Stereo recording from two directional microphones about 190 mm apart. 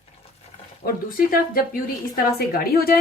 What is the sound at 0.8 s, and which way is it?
A woman's voice, 50° left (ahead or behind).